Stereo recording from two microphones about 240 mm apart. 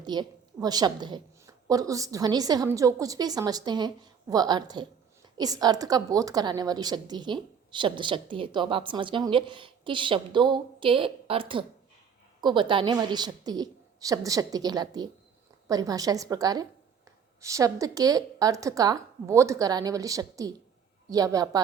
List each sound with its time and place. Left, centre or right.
0.0 s a woman's voice: centre